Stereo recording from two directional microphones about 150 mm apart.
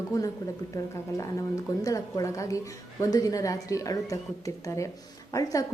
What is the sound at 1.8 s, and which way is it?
A woman's voice, 25° left (ahead or behind).